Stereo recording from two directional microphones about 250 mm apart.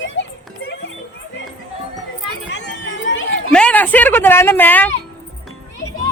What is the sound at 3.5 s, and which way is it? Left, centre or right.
A woman's voice, centre.